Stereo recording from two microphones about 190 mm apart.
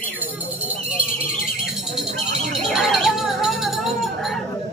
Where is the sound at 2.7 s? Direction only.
Centre (ahead or behind).